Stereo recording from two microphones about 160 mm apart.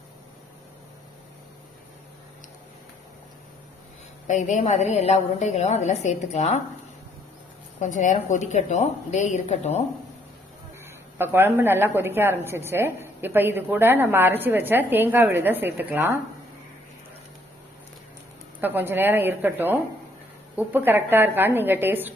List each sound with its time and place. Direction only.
4.3 s a woman's voice: 50° left (ahead or behind)
7.8 s a woman's voice: 50° left (ahead or behind)
10.8 s a woman's voice: 15° right (ahead or behind)
18.6 s a woman's voice: 10° right (ahead or behind)